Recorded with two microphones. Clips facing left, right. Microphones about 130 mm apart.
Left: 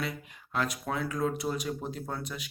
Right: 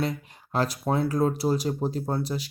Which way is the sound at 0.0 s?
35° right (ahead or behind).